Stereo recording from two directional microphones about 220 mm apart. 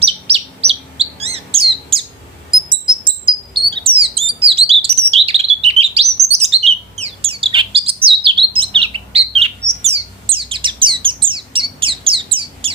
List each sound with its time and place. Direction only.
0.0 s chirp: 25° right (ahead or behind)